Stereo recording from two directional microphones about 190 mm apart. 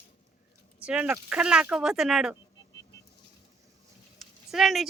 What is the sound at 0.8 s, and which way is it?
A woman's voice, 5° right (ahead or behind).